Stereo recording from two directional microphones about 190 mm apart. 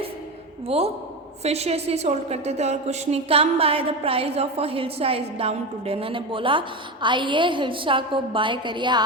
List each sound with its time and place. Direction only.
1.5 s a woman's voice: 35° right (ahead or behind)